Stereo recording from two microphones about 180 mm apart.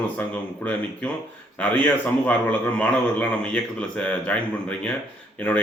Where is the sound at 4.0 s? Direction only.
5° left (ahead or behind).